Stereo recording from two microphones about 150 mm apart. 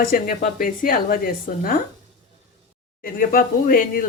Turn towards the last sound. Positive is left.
turn(degrees=75)  # may be behind; listen again after turning